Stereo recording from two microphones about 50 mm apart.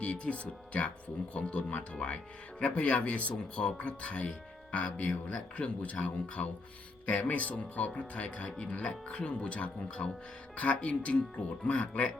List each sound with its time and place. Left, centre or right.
0.0 s speech: left